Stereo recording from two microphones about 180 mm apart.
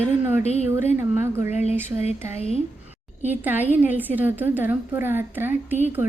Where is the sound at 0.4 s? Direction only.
35° left (ahead or behind).